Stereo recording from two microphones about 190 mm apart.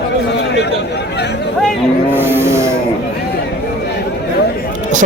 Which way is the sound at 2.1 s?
10° right (ahead or behind).